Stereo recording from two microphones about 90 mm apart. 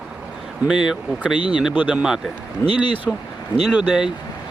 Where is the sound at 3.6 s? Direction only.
5° right (ahead or behind).